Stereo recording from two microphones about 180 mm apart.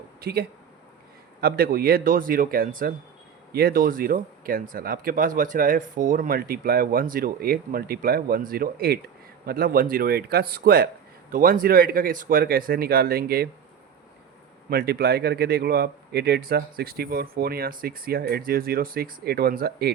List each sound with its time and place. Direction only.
0.2 s speech: 65° right (ahead or behind)
14.7 s speech: 60° right (ahead or behind)